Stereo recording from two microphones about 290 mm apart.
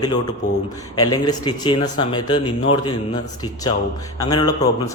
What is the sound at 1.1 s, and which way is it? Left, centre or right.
A man's voice, centre.